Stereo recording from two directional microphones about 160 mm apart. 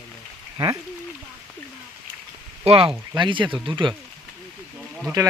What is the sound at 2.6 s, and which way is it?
Speech, 35° right (ahead or behind).